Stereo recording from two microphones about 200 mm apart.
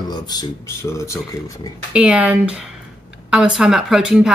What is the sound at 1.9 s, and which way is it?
Speech, 5° right (ahead or behind).